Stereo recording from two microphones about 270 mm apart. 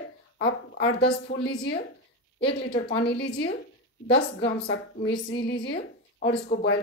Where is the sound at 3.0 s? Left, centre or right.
Left.